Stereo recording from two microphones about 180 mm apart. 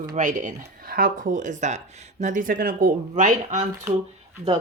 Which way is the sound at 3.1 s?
45° right (ahead or behind).